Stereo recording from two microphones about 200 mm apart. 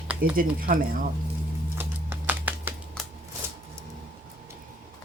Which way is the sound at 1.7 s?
10° right (ahead or behind).